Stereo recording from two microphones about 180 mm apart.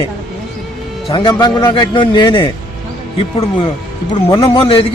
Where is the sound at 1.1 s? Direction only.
20° left (ahead or behind).